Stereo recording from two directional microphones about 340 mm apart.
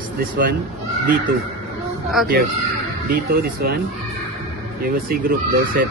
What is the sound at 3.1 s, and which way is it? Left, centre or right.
Speech, right.